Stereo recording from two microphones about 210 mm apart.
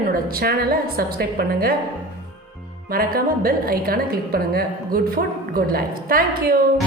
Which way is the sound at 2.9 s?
45° right (ahead or behind).